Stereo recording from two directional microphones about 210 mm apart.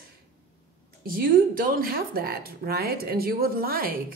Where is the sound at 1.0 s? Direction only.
45° right (ahead or behind).